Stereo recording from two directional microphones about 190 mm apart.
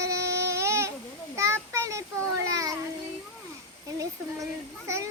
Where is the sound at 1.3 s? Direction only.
15° right (ahead or behind).